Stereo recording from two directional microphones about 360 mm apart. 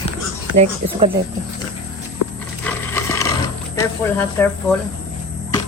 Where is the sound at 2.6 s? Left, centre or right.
Centre.